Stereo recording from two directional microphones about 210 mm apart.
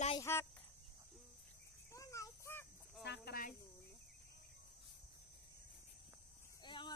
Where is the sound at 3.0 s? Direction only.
50° left (ahead or behind).